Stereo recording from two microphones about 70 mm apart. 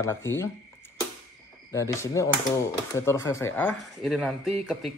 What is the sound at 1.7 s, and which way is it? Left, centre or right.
Speech, left.